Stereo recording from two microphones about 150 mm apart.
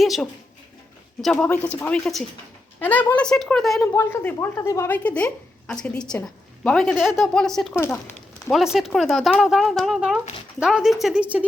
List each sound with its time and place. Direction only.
0.0 s speech: centre (ahead or behind)
3.9 s speech: 15° left (ahead or behind); by 11.4 s 10° right (ahead or behind)